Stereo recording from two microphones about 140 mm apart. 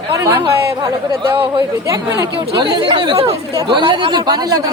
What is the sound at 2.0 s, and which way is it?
Speech, 25° right (ahead or behind).